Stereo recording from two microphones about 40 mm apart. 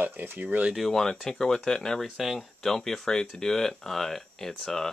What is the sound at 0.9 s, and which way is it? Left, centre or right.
Speech, centre.